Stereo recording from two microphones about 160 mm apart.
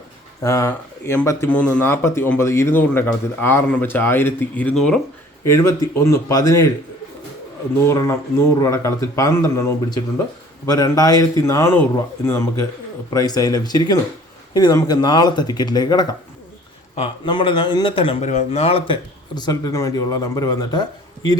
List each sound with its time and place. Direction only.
0.4 s speech: 15° left (ahead or behind)
5.5 s speech: 20° left (ahead or behind)
7.8 s a man's voice: 20° left (ahead or behind); by 18.3 s 35° left (ahead or behind)
18.3 s speech: 45° left (ahead or behind); by 20.8 s 25° left (ahead or behind)